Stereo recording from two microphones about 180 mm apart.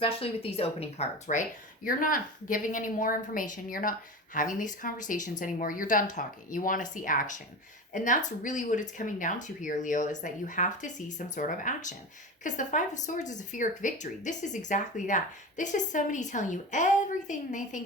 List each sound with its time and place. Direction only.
0.0 s speech: 30° left (ahead or behind)